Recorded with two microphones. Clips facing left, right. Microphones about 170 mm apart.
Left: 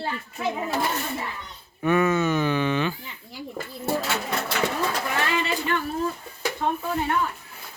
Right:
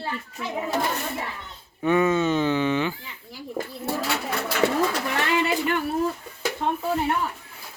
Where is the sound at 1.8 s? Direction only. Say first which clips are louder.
Right 1 dB; 25° right (ahead or behind).